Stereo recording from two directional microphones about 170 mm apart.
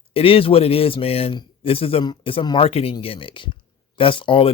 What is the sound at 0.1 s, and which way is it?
Speech, 35° left (ahead or behind).